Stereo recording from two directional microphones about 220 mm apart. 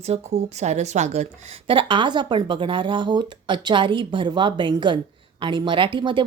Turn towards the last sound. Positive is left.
turn(degrees=-20)  # may be behind; listen again after turning